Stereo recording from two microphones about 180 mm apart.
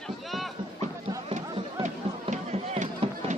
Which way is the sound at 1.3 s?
35° right (ahead or behind).